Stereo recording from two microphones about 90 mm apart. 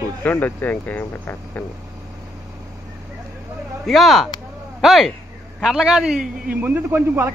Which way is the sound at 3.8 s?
Centre (ahead or behind).